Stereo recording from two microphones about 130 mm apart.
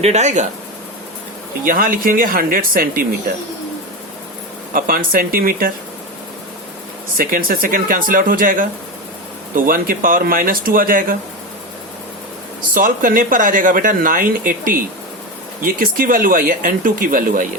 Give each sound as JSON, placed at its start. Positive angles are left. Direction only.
{"t": 0.0, "sound": "speech", "side_deg": -60}
{"t": 1.6, "sound": "speech", "side_deg": -90}
{"t": 4.7, "sound": "speech", "side_deg": -90}
{"t": 7.2, "sound": "speech", "side_deg": -90}
{"t": 12.7, "sound": "speech", "side_deg": -90}